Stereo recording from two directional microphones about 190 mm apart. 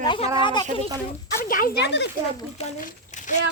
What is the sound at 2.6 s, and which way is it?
Speech, 40° left (ahead or behind).